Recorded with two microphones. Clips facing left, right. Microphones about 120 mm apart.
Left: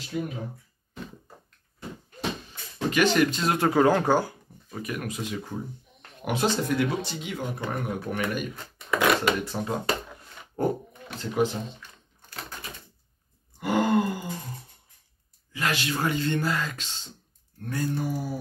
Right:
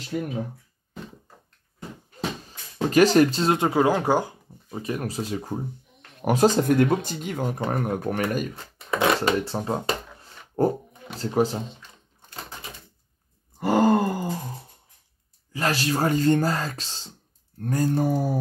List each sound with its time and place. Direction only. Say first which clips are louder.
2.9 s speech: right 5 dB; 35° right (ahead or behind)
3.5 s speech: left 3 dB; 15° right (ahead or behind); by 9.8 s 30° right (ahead or behind)
10.2 s a sound: right 6 dB; 35° right (ahead or behind)
11.1 s speech: right 3 dB; 35° right (ahead or behind)
13.6 s groan: right 4 dB; 40° right (ahead or behind)
15.5 s speech: right 4 dB; 35° right (ahead or behind)